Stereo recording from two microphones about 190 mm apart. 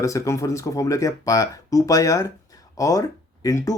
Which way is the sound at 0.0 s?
15° left (ahead or behind).